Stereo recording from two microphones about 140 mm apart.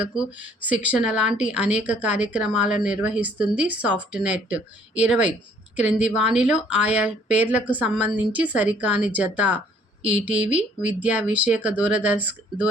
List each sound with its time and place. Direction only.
0.0 s speech: 10° right (ahead or behind)